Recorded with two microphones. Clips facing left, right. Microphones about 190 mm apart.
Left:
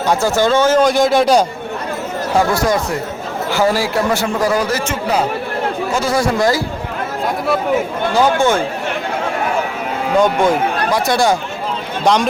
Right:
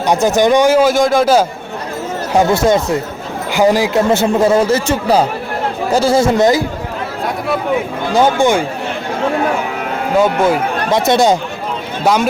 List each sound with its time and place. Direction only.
0.1 s speech: 20° right (ahead or behind); by 1.5 s centre (ahead or behind)
2.3 s speech: 20° right (ahead or behind)
8.4 s speech: 15° right (ahead or behind)
10.2 s a man's voice: 5° right (ahead or behind)
10.9 s speech: 20° right (ahead or behind)
12.0 s a man's voice: 5° right (ahead or behind)